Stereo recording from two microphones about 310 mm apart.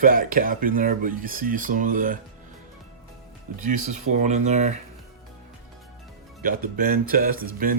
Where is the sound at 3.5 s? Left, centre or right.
Right.